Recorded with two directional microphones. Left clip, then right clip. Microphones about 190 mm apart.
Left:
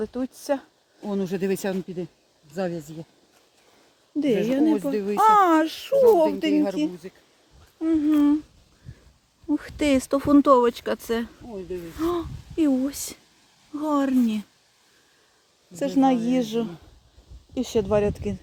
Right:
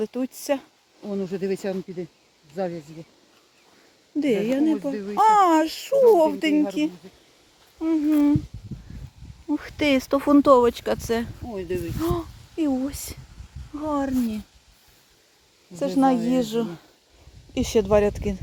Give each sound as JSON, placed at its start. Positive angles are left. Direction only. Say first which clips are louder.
{"t": 0.0, "sound": "speech", "louder": "right 2 dB", "side_deg": -10}
{"t": 1.1, "sound": "speech", "louder": "left 1 dB", "side_deg": 60}
{"t": 4.2, "sound": "speech", "louder": "even", "side_deg": 0}
{"t": 4.9, "sound": "speech", "louder": "left 4 dB", "side_deg": 45}
{"t": 5.1, "sound": "speech", "louder": "even", "side_deg": 5}
{"t": 9.5, "sound": "speech", "louder": "even", "side_deg": 5}
{"t": 15.7, "sound": "speech", "louder": "right 1 dB", "side_deg": 0}